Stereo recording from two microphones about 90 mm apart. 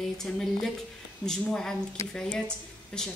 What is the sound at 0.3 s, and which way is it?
A man's voice, 10° left (ahead or behind).